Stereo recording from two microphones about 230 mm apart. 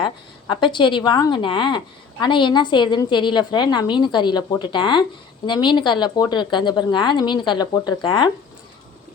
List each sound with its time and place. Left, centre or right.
0.0 s a woman's voice: centre